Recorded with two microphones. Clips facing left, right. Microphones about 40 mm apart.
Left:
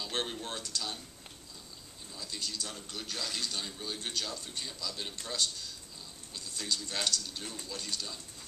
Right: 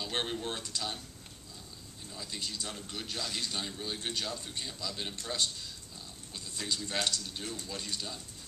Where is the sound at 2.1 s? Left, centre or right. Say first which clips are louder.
Even; centre.